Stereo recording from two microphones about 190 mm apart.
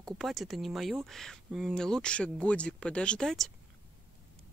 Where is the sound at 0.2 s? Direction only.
Centre (ahead or behind).